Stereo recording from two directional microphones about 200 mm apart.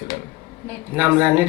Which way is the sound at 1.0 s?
10° right (ahead or behind).